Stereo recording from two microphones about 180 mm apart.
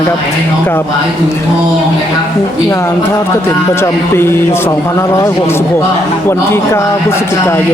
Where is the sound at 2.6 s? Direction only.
15° left (ahead or behind).